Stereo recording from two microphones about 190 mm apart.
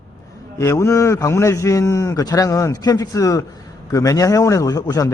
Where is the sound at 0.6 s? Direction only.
15° left (ahead or behind).